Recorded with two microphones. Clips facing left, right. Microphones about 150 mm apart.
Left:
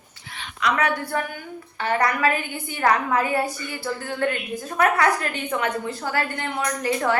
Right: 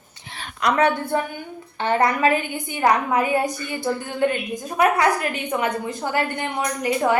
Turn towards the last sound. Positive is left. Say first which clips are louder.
# right 2 dB
turn(degrees=-15)  # may be behind; listen again after turning